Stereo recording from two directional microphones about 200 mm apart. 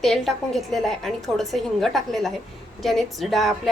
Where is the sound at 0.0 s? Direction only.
Centre (ahead or behind).